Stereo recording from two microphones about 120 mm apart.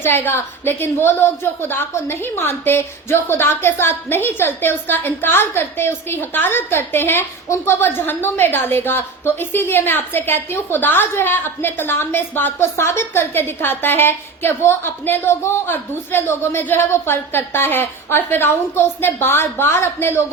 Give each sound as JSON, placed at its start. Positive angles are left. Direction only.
{"t": 0.0, "sound": "a woman's voice", "side_deg": 20}